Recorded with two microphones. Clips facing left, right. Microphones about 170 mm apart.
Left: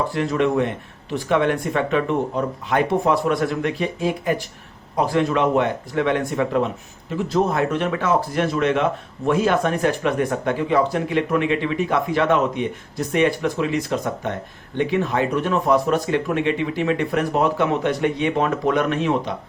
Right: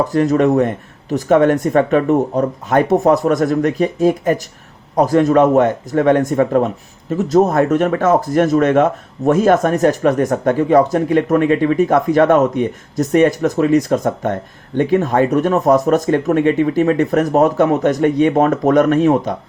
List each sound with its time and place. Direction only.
0.0 s speech: 40° right (ahead or behind)